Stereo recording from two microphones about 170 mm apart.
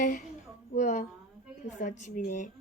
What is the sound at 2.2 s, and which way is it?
Speech, 55° left (ahead or behind).